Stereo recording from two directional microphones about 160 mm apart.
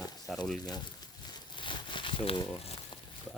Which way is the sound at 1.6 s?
30° left (ahead or behind).